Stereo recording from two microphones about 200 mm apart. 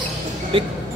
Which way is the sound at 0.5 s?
25° right (ahead or behind).